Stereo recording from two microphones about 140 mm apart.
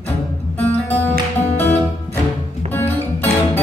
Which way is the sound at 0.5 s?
15° left (ahead or behind).